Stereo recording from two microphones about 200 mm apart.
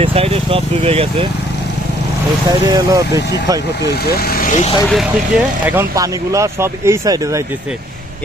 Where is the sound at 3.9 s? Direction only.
50° left (ahead or behind).